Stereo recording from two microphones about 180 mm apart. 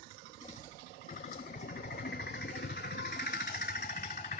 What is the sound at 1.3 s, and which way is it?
Vehicle, 55° left (ahead or behind).